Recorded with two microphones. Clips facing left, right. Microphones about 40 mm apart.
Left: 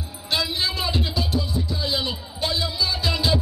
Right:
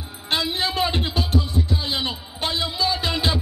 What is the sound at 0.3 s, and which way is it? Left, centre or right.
Music, right.